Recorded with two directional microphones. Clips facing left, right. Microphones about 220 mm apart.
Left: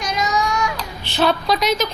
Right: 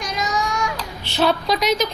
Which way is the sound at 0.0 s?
50° right (ahead or behind).